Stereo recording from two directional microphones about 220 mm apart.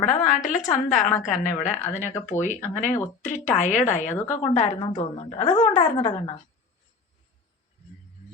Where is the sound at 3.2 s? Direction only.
35° left (ahead or behind).